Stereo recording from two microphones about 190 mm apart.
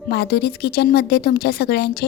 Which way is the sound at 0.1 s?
60° left (ahead or behind).